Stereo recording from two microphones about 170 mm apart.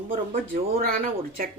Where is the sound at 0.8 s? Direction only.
60° right (ahead or behind).